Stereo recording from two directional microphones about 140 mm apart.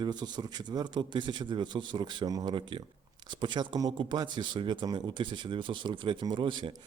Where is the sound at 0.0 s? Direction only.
30° right (ahead or behind).